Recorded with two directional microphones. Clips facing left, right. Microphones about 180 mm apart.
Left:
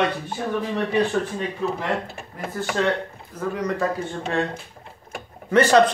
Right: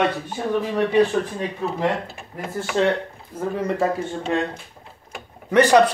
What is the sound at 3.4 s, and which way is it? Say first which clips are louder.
Speech: right 2 dB; 25° right (ahead or behind).